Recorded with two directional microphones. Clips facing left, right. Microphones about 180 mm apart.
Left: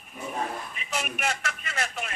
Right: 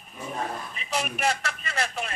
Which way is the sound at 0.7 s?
30° right (ahead or behind).